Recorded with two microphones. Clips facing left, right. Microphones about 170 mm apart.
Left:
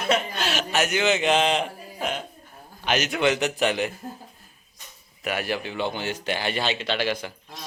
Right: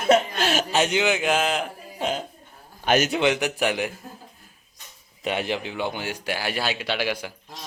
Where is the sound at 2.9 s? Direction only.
45° right (ahead or behind).